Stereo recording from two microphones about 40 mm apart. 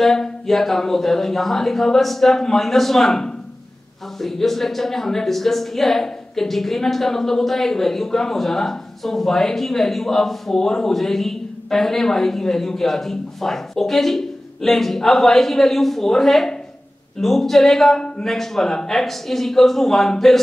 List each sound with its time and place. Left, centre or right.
0.0 s a woman's voice: centre
17.9 s speech: left
18.2 s a woman's voice: centre